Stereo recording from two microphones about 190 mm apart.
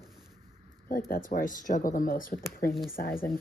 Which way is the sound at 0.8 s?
50° left (ahead or behind).